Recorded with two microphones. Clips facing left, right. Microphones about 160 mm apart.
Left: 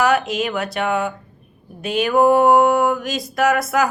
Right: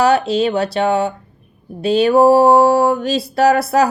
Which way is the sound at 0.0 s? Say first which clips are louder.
Right 4 dB; 30° right (ahead or behind).